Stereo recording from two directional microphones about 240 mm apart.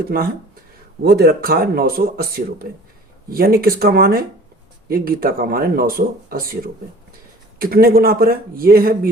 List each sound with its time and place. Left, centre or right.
0.1 s speech: right